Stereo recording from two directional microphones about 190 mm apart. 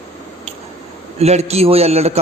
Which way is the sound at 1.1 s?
35° right (ahead or behind).